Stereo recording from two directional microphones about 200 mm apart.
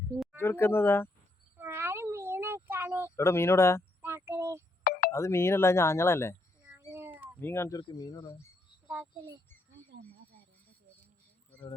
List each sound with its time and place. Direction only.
0.3 s speech: 10° left (ahead or behind)
1.5 s a sound: 10° right (ahead or behind)
3.2 s speech: 10° left (ahead or behind)
4.0 s a sound: 10° right (ahead or behind)
4.8 s telephone: 50° left (ahead or behind)
5.1 s speech: 15° left (ahead or behind)
6.9 s cat: 10° right (ahead or behind)
7.3 s speech: 10° left (ahead or behind)